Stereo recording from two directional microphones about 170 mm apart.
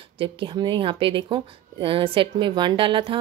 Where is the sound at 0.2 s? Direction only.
30° right (ahead or behind).